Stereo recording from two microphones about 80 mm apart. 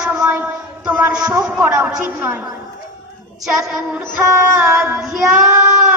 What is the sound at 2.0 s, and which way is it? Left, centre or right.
Speech, right.